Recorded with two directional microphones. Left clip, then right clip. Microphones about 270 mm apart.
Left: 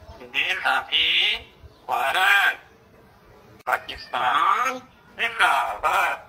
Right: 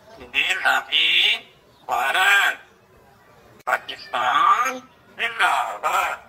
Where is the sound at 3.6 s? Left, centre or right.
Centre.